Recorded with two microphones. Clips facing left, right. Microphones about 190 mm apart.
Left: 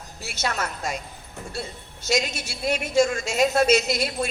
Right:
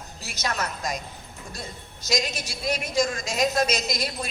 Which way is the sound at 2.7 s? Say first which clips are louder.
Left 4 dB; 40° right (ahead or behind).